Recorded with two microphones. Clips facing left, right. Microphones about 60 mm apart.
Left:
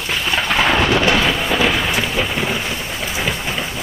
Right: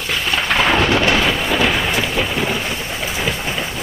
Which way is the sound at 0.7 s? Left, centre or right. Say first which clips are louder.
Even; centre.